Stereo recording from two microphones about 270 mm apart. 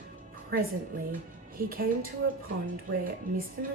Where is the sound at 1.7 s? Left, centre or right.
Right.